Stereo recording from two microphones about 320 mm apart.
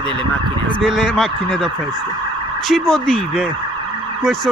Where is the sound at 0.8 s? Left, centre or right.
Centre.